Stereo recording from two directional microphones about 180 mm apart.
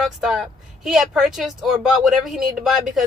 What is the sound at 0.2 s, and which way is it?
A woman's voice, centre (ahead or behind).